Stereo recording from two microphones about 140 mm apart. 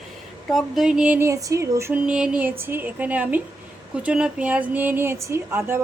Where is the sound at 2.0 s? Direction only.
5° right (ahead or behind).